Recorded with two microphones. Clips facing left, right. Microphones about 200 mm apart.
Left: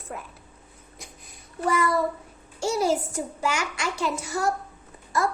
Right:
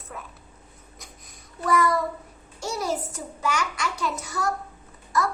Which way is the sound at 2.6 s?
30° left (ahead or behind).